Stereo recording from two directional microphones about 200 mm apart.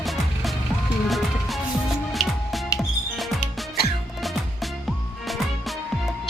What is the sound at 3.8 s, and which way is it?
Music, 50° left (ahead or behind).